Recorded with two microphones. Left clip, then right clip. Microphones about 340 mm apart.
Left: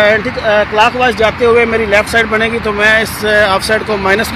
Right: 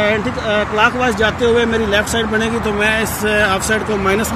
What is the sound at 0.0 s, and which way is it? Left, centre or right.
Speech, centre.